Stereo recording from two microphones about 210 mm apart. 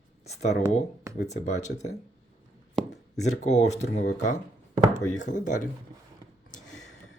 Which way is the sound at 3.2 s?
35° left (ahead or behind).